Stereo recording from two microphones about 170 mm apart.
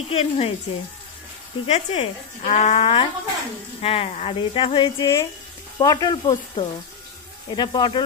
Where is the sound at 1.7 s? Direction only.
40° left (ahead or behind); by 6.3 s 20° left (ahead or behind).